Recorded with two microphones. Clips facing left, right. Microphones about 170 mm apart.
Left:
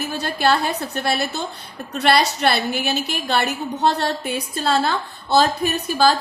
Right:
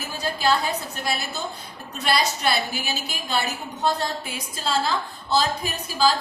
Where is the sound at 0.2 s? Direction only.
65° left (ahead or behind).